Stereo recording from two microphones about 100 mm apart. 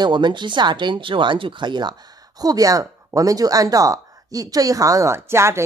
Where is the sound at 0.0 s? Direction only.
50° right (ahead or behind).